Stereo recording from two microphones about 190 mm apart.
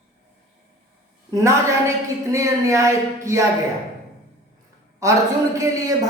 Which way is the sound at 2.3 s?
15° right (ahead or behind).